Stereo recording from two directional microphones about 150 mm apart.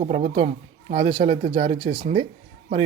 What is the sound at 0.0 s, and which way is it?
Speech, 40° right (ahead or behind).